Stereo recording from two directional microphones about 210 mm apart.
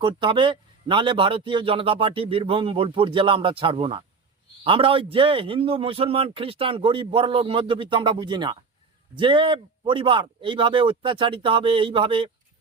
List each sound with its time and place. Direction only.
0.0 s a man's voice: 20° right (ahead or behind)